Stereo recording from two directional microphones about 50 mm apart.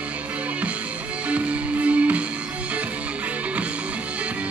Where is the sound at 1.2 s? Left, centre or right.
Right.